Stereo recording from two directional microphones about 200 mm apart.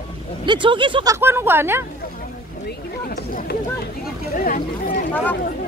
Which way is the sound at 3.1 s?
45° left (ahead or behind).